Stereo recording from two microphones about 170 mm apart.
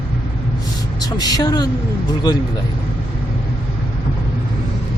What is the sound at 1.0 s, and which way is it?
Speech, 20° left (ahead or behind).